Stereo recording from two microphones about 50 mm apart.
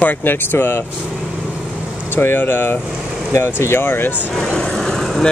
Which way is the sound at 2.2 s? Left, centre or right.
Left.